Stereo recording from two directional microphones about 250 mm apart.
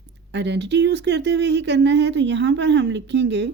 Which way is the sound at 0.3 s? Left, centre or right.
Right.